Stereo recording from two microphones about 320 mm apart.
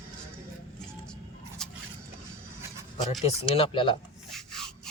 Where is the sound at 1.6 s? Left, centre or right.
Centre.